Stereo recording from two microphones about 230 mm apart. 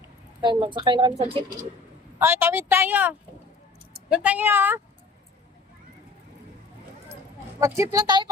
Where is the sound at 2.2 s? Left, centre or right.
Centre.